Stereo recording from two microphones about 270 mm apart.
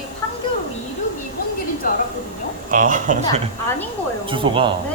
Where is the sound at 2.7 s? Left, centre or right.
Right.